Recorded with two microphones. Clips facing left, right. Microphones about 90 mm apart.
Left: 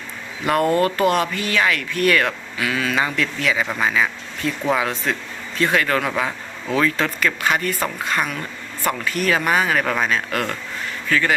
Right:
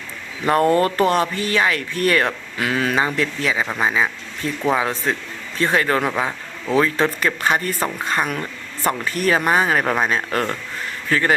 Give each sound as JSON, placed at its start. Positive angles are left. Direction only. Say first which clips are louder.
{"t": 0.4, "sound": "speech", "louder": "right 2 dB", "side_deg": -30}
{"t": 2.6, "sound": "speech", "louder": "right 2 dB", "side_deg": -45}
{"t": 3.0, "sound": "speech", "louder": "right 1 dB", "side_deg": -30}